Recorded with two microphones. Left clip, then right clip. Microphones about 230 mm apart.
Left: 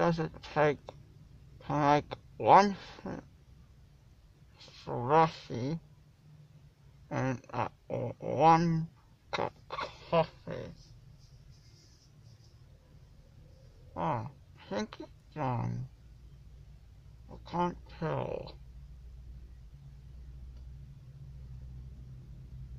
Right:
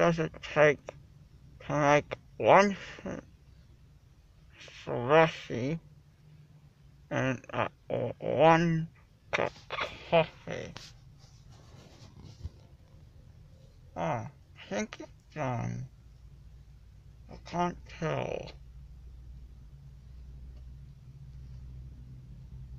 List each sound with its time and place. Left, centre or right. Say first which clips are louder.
0.0 s speech: right 3 dB; centre
4.6 s speech: right 3 dB; centre
7.1 s speech: right 3 dB; centre
13.9 s speech: right 1 dB; centre
17.3 s speech: right 1 dB; centre